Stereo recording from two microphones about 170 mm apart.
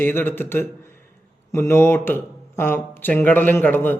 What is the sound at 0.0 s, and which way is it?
Speech, 15° left (ahead or behind).